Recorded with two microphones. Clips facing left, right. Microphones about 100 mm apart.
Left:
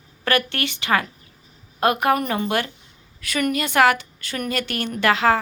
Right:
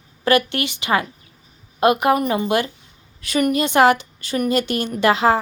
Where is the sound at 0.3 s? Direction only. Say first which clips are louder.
Right 4 dB; 15° right (ahead or behind).